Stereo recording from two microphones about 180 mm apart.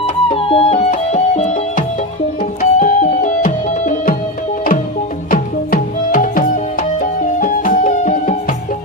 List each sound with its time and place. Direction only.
0.3 s music: 30° left (ahead or behind)
2.4 s music: 50° left (ahead or behind)
5.3 s music: 50° left (ahead or behind)